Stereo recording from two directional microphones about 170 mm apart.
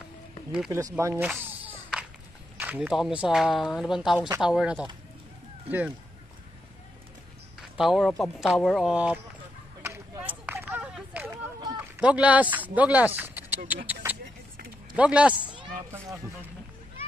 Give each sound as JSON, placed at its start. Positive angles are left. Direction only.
{"t": 0.7, "sound": "speech", "side_deg": -20}
{"t": 1.2, "sound": "a sound", "side_deg": -10}
{"t": 2.5, "sound": "speech", "side_deg": -10}
{"t": 7.7, "sound": "speech", "side_deg": 0}
{"t": 9.8, "sound": "a sound", "side_deg": -15}
{"t": 15.0, "sound": "a man's voice", "side_deg": -5}